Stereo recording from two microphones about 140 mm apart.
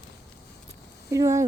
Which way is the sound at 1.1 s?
20° right (ahead or behind).